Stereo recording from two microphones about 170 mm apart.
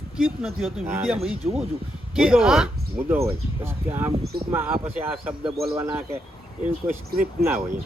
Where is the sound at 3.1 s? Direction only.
15° right (ahead or behind).